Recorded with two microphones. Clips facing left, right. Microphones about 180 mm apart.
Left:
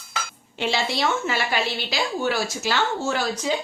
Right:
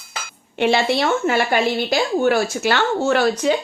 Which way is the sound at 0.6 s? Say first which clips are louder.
Right 7 dB; 60° right (ahead or behind).